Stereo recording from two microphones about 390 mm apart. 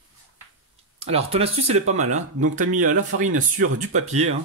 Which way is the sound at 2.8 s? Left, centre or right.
Right.